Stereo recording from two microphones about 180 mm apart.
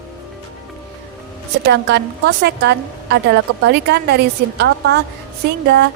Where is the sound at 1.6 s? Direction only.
70° right (ahead or behind).